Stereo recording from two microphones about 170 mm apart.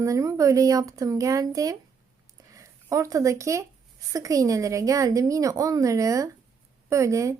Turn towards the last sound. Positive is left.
turn(degrees=-20)  # may be behind; listen again after turning